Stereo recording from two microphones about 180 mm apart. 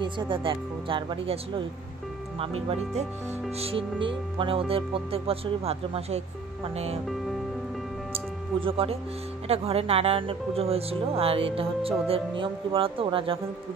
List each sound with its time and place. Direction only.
0.0 s speech: 25° right (ahead or behind)
8.1 s music: 30° right (ahead or behind)
9.5 s speech: 35° right (ahead or behind)